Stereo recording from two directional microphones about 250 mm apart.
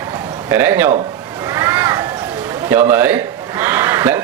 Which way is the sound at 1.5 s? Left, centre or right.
Centre.